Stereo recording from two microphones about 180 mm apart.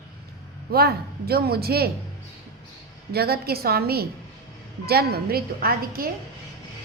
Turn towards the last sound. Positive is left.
turn(degrees=-55)  # may be behind; listen again after turning